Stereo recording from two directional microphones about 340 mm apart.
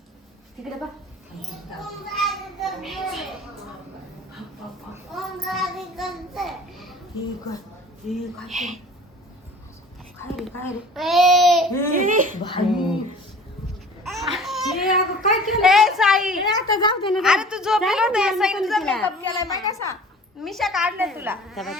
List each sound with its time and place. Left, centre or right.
2.2 s child singing: centre
5.1 s a sound: centre
8.1 s a woman's voice: centre
10.3 s a woman's voice: centre
11.9 s speech: right
12.6 s a woman's voice: centre
14.0 s babbling: centre
16.5 s a child's voice: centre
17.1 s a woman's voice: centre